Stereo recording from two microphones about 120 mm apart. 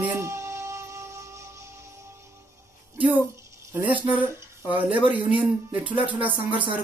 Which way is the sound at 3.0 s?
15° right (ahead or behind).